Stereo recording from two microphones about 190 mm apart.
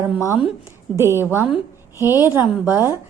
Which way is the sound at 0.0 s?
15° right (ahead or behind).